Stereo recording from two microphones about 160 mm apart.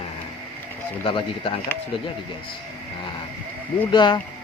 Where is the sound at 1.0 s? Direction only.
35° left (ahead or behind).